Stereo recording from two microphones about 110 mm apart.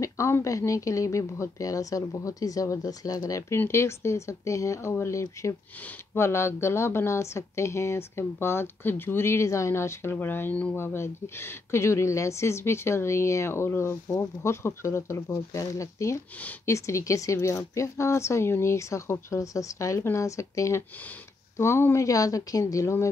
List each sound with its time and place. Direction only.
0.0 s a woman's voice: 25° left (ahead or behind)